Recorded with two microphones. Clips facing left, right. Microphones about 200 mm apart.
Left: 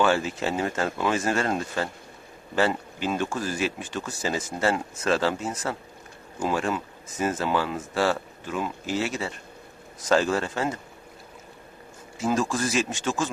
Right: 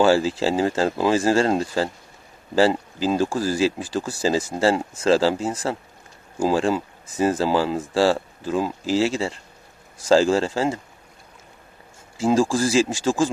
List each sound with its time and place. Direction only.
0.0 s speech: 30° right (ahead or behind)
12.2 s speech: 30° right (ahead or behind)